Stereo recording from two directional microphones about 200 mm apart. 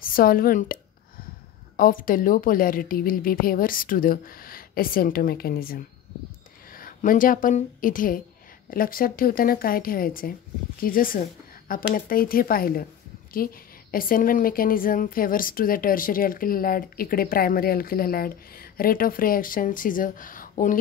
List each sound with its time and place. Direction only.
0.0 s speech: 45° left (ahead or behind)
1.8 s a woman's voice: 45° left (ahead or behind)